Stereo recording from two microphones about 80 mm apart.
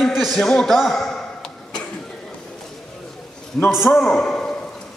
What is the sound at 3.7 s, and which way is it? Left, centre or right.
Speech, centre.